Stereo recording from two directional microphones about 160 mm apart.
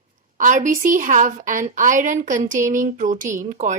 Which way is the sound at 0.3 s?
55° right (ahead or behind).